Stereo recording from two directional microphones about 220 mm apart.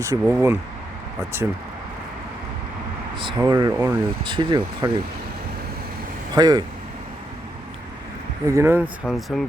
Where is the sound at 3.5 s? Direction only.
15° right (ahead or behind).